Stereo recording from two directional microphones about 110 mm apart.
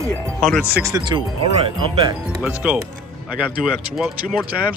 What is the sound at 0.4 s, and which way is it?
Speech, centre (ahead or behind).